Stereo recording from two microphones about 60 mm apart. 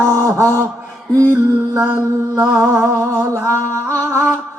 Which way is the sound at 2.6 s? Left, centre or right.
Right.